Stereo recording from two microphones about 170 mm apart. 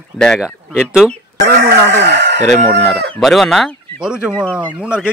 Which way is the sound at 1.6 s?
80° right.